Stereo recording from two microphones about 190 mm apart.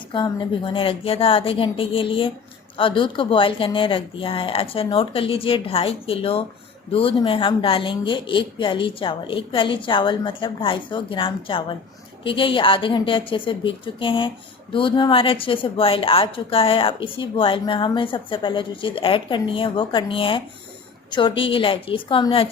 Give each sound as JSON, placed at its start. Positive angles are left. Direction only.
{"t": 0.1, "sound": "speech", "side_deg": 25}